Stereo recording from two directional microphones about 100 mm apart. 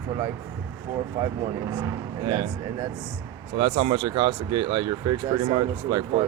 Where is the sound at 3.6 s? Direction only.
60° right (ahead or behind).